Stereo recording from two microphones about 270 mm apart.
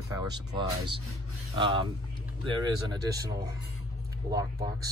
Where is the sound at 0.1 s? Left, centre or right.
Centre.